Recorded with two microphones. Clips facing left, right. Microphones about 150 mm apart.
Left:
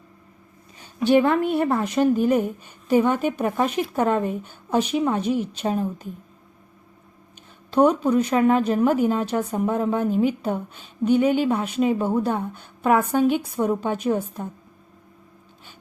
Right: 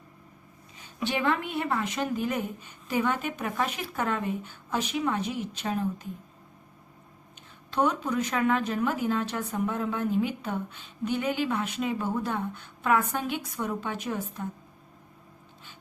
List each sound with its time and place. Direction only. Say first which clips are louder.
0.9 s a woman's voice: left 10 dB; 40° left (ahead or behind)
7.9 s a woman's voice: left 9 dB; 35° left (ahead or behind)